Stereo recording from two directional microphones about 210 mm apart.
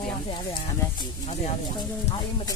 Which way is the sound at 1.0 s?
20° left (ahead or behind).